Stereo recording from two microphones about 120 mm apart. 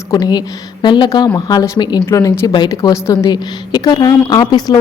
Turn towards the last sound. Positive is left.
turn(degrees=35)  # may be behind; listen again after turning